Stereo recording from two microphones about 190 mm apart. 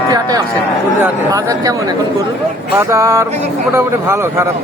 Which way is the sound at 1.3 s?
20° right (ahead or behind).